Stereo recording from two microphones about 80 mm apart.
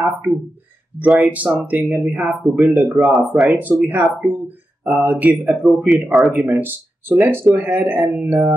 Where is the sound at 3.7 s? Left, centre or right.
Centre.